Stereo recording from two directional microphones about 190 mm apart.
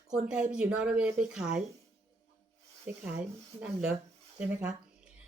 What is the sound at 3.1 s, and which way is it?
Speech, 5° right (ahead or behind).